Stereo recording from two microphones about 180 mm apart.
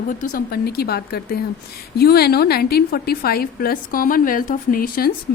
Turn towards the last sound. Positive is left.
turn(degrees=55)  # may be behind; listen again after turning